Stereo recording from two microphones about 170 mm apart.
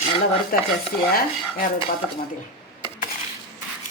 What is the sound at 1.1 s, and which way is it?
Dishes, 55° left (ahead or behind).